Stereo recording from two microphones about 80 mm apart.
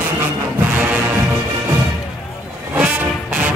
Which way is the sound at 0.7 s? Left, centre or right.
Centre.